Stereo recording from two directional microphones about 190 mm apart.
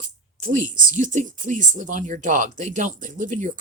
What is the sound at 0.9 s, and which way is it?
Speech, 40° right (ahead or behind).